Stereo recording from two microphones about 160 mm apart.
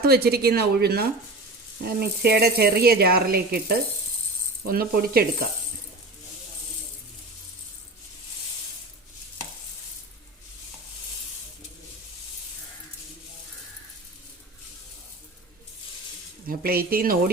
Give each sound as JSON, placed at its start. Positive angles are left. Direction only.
{"t": 0.0, "sound": "speech", "side_deg": -75}
{"t": 1.8, "sound": "speech", "side_deg": -75}
{"t": 16.5, "sound": "speech", "side_deg": -70}